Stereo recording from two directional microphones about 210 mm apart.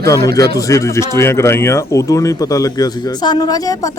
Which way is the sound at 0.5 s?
15° left (ahead or behind).